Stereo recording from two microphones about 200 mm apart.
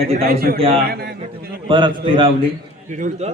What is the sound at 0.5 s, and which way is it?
Speech, 30° right (ahead or behind).